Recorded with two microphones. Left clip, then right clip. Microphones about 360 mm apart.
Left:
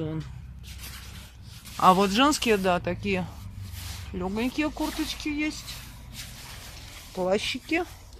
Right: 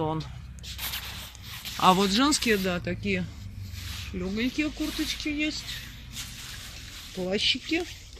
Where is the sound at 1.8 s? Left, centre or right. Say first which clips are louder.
Left 2 dB; centre.